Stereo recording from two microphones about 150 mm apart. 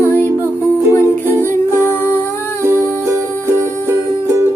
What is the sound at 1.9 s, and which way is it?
Music, 15° left (ahead or behind).